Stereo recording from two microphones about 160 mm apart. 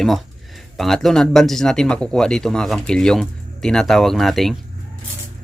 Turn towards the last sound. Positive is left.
turn(degrees=0)  # may be behind; listen again after turning